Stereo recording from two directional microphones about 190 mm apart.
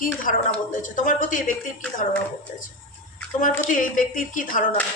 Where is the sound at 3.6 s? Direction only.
45° left (ahead or behind).